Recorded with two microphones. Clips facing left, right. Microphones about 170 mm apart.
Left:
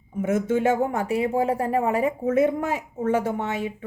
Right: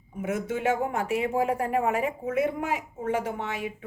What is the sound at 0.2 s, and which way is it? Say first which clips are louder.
Speech: left 7 dB; 45° left (ahead or behind).